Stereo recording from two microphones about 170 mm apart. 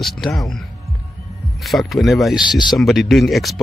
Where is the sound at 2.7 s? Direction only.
Centre (ahead or behind).